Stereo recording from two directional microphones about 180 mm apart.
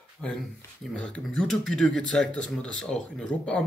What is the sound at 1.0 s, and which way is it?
Speech, 5° left (ahead or behind).